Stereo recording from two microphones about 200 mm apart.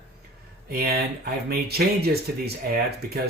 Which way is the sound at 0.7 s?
50° right (ahead or behind).